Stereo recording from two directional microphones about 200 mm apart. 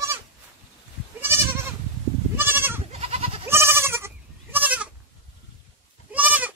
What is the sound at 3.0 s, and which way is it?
Goat, 30° right (ahead or behind).